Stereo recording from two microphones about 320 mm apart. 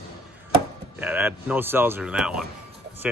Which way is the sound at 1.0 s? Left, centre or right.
Centre.